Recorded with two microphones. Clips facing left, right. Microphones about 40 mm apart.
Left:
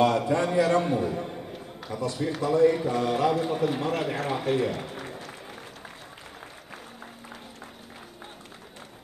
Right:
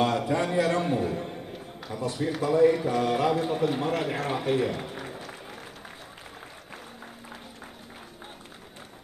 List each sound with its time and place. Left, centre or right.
0.3 s a man's voice: centre
1.1 s a sound: centre
2.1 s a man's voice: centre